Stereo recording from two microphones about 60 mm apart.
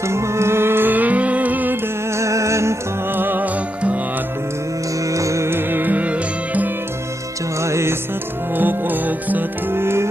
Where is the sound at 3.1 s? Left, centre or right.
Right.